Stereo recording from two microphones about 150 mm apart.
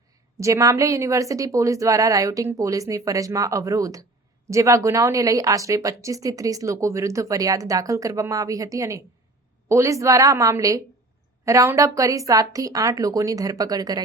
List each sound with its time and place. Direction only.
0.3 s speech: 20° right (ahead or behind)